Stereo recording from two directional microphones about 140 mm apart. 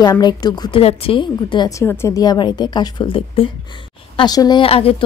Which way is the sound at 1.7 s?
20° left (ahead or behind).